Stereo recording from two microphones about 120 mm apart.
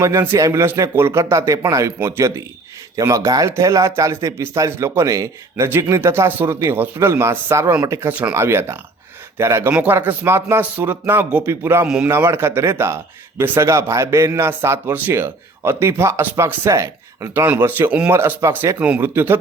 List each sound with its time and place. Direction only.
0.0 s speech: 25° right (ahead or behind)